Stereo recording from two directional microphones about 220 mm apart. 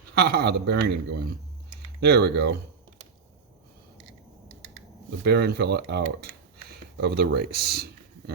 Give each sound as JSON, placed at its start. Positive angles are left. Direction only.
{"t": 0.1, "sound": "a man's voice", "side_deg": -45}
{"t": 5.2, "sound": "a man's voice", "side_deg": -45}